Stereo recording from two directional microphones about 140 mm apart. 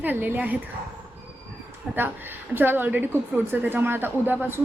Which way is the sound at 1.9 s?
15° right (ahead or behind).